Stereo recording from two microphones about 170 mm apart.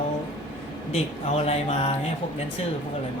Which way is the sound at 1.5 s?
40° left (ahead or behind).